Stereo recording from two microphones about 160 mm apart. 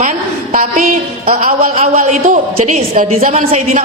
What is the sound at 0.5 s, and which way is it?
Music, 60° right (ahead or behind).